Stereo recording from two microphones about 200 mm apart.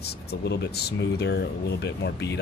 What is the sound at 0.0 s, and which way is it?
Speech, 55° left (ahead or behind).